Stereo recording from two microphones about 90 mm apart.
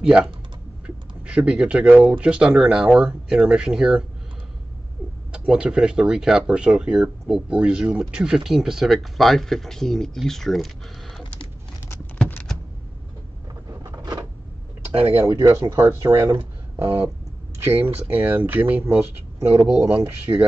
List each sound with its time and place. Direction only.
0.0 s speech: 10° right (ahead or behind)
5.3 s speech: 10° right (ahead or behind)
13.7 s a sound: 35° right (ahead or behind)
14.9 s speech: 25° right (ahead or behind)
15.3 s speech: 35° right (ahead or behind); by 20.0 s 20° right (ahead or behind)
20.3 s speech: 50° right (ahead or behind)